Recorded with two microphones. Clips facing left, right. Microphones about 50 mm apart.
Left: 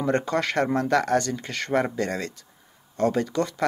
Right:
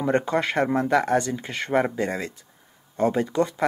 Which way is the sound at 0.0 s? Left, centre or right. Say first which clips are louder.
Right 1 dB; centre.